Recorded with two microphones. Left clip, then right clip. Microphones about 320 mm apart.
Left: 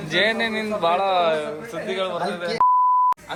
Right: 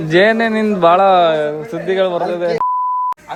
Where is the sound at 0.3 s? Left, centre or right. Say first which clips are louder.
Right 8 dB; right.